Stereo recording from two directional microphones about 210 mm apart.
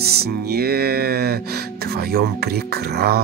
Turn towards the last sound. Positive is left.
turn(degrees=-50)  # may be behind; listen again after turning